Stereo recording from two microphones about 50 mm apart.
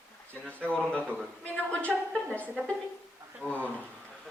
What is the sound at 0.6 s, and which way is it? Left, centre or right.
Speech, left.